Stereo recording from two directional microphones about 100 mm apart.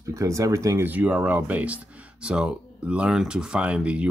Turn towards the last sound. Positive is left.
turn(degrees=-10)  # may be behind; listen again after turning